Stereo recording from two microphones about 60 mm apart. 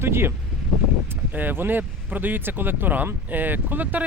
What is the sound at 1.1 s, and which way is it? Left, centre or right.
Speech, right.